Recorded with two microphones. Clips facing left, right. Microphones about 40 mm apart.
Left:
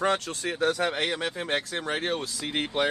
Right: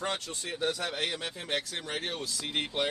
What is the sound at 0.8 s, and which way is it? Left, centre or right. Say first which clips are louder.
Speech: left 6 dB; left.